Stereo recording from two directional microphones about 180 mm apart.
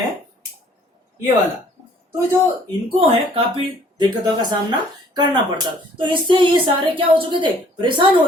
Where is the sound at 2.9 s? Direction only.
30° right (ahead or behind).